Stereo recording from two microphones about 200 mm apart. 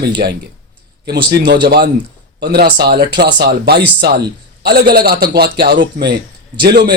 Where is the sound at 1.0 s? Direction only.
55° right (ahead or behind).